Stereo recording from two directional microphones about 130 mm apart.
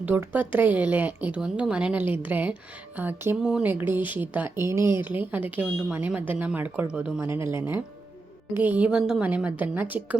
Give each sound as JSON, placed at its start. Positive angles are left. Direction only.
{"t": 0.0, "sound": "a woman's voice", "side_deg": -15}
{"t": 3.4, "sound": "speech", "side_deg": -5}
{"t": 3.7, "sound": "a woman's voice", "side_deg": -15}